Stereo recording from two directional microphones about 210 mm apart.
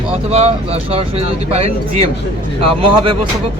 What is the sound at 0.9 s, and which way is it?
Speech, 30° right (ahead or behind).